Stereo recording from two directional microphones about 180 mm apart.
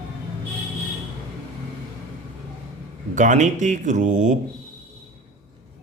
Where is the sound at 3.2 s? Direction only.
45° right (ahead or behind).